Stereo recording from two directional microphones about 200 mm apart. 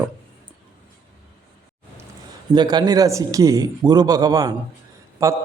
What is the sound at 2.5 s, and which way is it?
A man's voice, 20° right (ahead or behind).